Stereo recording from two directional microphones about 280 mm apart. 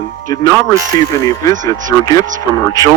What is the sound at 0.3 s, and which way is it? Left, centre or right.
Speech, centre.